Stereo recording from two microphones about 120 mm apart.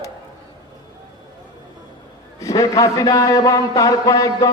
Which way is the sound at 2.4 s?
30° left (ahead or behind).